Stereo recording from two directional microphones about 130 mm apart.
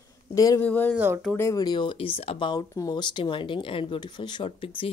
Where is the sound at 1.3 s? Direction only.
20° left (ahead or behind); by 2.6 s 40° left (ahead or behind).